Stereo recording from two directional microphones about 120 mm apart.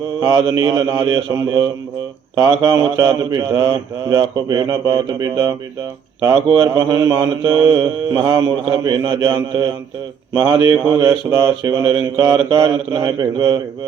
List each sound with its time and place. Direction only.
0.2 s mantra: 35° right (ahead or behind)
6.7 s mantra: 30° right (ahead or behind)